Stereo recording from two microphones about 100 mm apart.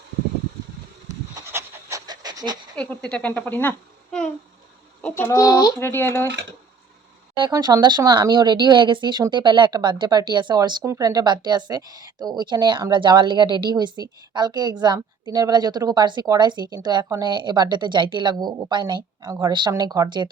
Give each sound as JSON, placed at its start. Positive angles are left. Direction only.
{"t": 1.5, "sound": "pant", "side_deg": -25}
{"t": 2.0, "sound": "pant", "side_deg": -45}
{"t": 2.7, "sound": "a child's voice", "side_deg": 15}
{"t": 5.1, "sound": "speech", "side_deg": 25}
{"t": 5.8, "sound": "speech", "side_deg": 25}
{"t": 7.6, "sound": "a woman's voice", "side_deg": -45}